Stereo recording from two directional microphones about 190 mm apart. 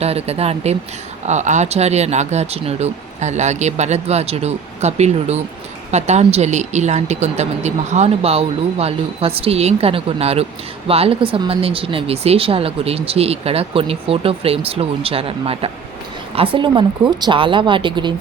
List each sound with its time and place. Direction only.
0.0 s speech: 35° right (ahead or behind)